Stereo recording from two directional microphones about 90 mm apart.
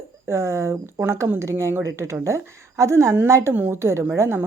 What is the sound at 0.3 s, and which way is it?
A woman's voice, 30° right (ahead or behind).